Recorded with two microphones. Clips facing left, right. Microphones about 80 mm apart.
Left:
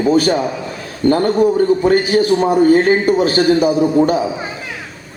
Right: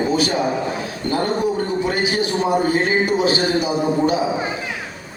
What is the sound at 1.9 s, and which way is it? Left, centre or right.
A man's voice, left.